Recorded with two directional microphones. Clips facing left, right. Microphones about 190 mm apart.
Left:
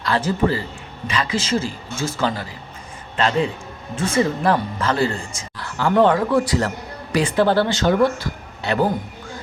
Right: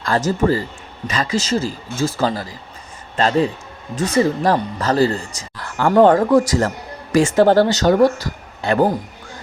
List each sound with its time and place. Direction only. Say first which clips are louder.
0.0 s speech: right 2 dB; 45° right (ahead or behind)